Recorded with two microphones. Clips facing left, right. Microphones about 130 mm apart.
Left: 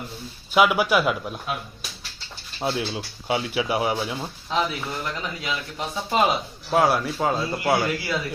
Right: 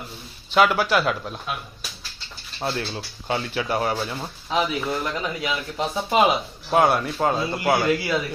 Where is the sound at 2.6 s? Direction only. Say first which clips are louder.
Left 1 dB; 10° left (ahead or behind).